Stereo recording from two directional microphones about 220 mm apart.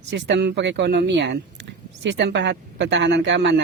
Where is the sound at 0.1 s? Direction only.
50° right (ahead or behind).